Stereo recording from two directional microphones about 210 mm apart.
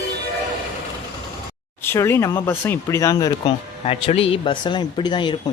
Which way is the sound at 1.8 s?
10° left (ahead or behind).